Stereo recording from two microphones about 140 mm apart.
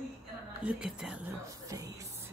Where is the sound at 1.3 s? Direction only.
25° right (ahead or behind).